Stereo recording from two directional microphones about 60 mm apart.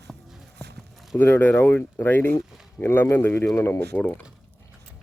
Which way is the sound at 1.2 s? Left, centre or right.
Left.